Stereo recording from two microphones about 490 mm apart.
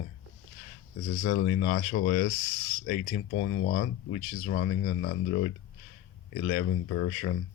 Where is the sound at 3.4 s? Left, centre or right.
Left.